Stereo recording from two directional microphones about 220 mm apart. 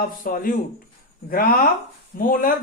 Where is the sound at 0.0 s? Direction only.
40° left (ahead or behind).